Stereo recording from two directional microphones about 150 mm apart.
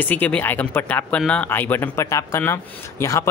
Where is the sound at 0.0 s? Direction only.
10° left (ahead or behind).